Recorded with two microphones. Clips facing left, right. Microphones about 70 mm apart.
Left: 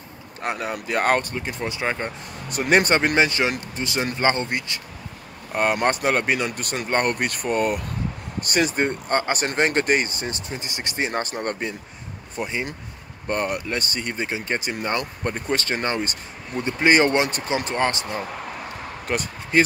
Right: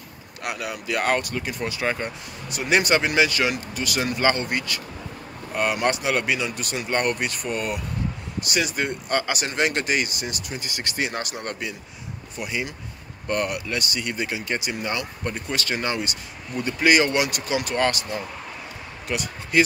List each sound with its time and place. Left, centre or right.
0.4 s speech: left
1.3 s speech: left
2.5 s speech: left
5.5 s speech: left
19.0 s speech: left